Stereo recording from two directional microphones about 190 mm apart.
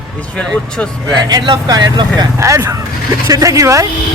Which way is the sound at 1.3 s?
20° right (ahead or behind).